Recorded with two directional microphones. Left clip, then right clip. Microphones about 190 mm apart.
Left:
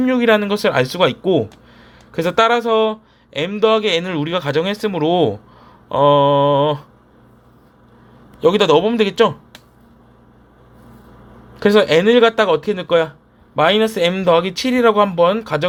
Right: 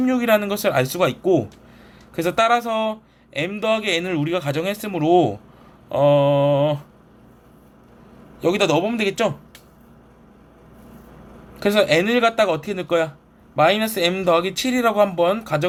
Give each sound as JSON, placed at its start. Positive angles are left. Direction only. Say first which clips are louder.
{"t": 0.0, "sound": "speech", "louder": "left 4 dB", "side_deg": 25}
{"t": 8.4, "sound": "a man's voice", "louder": "left 6 dB", "side_deg": 30}
{"t": 11.6, "sound": "speech", "louder": "left 5 dB", "side_deg": 30}